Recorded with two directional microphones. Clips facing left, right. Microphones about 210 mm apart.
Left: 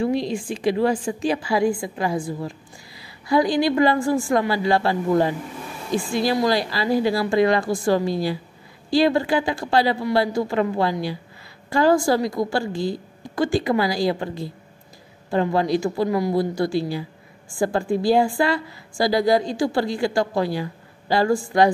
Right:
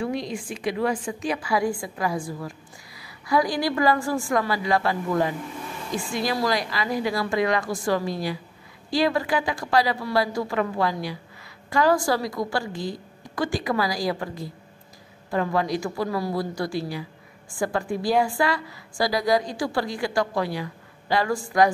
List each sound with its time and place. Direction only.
0.0 s a woman's voice: 30° left (ahead or behind)